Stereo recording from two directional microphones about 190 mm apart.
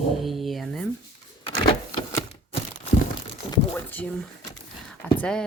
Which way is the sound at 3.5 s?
10° left (ahead or behind).